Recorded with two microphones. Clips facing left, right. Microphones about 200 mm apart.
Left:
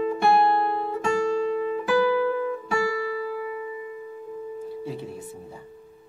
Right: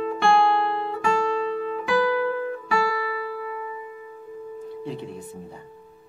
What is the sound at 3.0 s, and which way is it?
Music, 50° left (ahead or behind).